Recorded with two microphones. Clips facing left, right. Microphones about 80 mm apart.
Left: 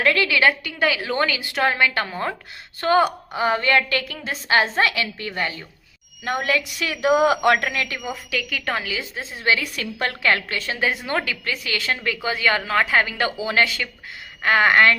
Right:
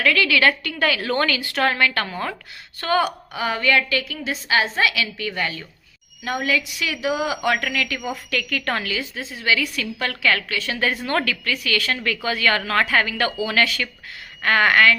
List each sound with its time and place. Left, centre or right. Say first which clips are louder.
0.0 s a woman's voice: even; left
0.6 s a woman's voice: even; centre
6.2 s a woman's voice: even; left
8.3 s a woman's voice: right 1 dB; centre
9.1 s a woman's voice: left 1 dB; left
10.8 s a woman's voice: right 1 dB; centre
11.4 s a woman's voice: right 2 dB; left